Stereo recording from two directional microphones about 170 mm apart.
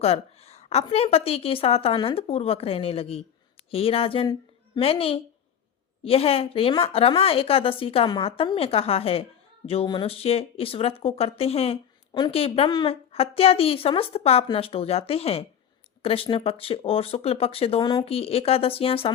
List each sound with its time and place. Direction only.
0.0 s a woman's voice: 40° left (ahead or behind)